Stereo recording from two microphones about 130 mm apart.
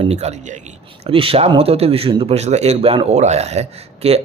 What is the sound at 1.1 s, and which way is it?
Speech, 45° right (ahead or behind).